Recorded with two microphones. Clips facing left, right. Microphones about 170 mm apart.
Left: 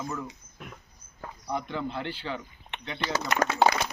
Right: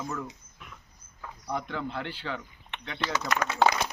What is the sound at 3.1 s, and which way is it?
Speech, 35° left (ahead or behind).